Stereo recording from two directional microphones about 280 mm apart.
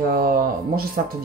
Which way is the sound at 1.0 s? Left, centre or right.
Right.